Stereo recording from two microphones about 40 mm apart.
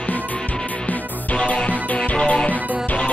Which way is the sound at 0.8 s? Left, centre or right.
Left.